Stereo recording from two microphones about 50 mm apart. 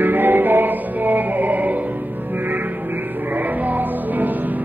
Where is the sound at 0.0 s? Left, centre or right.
Right.